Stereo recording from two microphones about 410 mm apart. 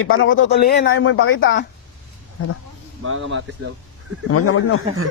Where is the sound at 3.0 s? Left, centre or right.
Right.